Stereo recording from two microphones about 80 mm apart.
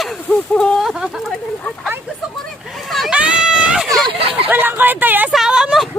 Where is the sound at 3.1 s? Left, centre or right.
Centre.